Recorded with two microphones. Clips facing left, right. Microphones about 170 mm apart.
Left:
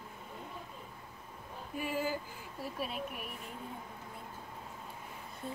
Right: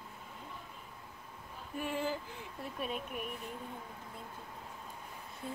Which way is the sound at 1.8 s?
5° left (ahead or behind).